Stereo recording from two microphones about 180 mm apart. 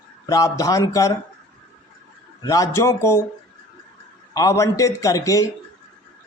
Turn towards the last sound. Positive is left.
turn(degrees=20)  # may be behind; listen again after turning